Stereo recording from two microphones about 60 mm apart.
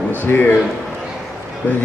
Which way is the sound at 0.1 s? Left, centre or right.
Left.